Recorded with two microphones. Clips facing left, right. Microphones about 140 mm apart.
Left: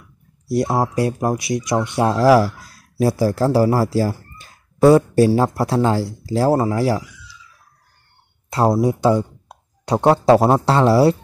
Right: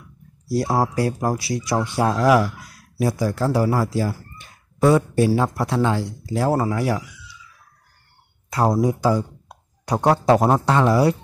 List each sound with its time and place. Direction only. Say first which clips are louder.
0.9 s speech: left 2 dB; 25° left (ahead or behind)
8.5 s speech: left 2 dB; 25° left (ahead or behind)
10.3 s speech: left 3 dB; 10° left (ahead or behind)
10.6 s speech: left 3 dB; 30° left (ahead or behind)